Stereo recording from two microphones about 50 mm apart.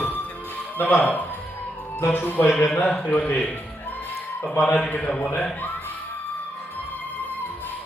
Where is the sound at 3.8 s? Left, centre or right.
Left.